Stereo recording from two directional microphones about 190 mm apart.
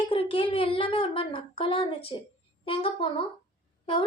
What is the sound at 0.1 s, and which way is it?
A woman's voice, 30° left (ahead or behind).